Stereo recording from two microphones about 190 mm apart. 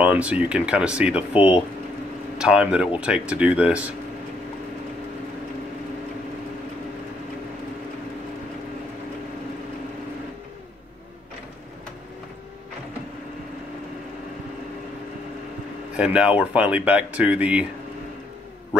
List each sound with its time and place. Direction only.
0.0 s speech: 5° right (ahead or behind)
1.3 s speech: 30° left (ahead or behind)
2.3 s speech: 5° right (ahead or behind)
16.0 s speech: 5° right (ahead or behind)